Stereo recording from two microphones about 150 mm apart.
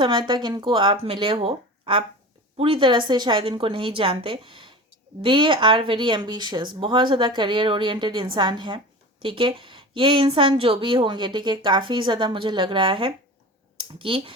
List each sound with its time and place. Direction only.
0.0 s a woman's voice: 30° right (ahead or behind)